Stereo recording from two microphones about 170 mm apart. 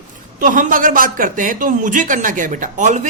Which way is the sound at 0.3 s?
50° right (ahead or behind).